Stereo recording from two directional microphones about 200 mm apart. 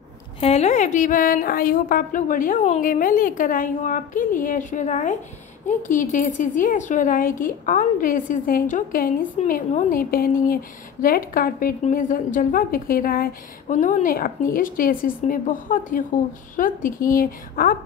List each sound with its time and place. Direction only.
0.4 s a woman's voice: 30° left (ahead or behind)